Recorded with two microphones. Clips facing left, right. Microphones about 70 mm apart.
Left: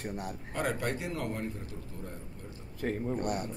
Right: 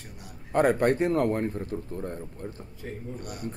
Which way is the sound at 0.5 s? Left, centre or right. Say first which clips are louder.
Right 11 dB; right.